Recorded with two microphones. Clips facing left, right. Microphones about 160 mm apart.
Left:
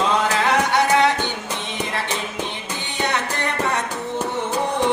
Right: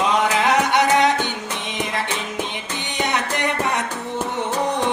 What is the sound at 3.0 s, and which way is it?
Music, 15° right (ahead or behind).